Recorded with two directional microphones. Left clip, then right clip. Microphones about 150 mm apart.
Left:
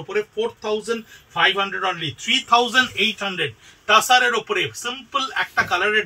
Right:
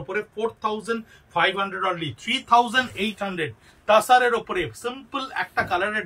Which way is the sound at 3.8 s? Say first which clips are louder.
Left 1 dB; 25° right (ahead or behind).